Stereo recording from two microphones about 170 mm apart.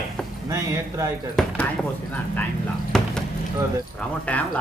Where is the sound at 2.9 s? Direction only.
Centre (ahead or behind).